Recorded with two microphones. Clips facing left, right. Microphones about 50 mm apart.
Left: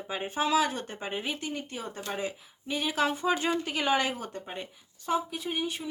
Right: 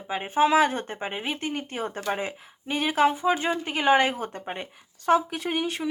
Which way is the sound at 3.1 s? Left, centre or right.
Centre.